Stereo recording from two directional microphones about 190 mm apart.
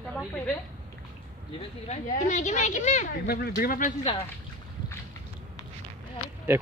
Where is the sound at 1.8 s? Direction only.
35° left (ahead or behind).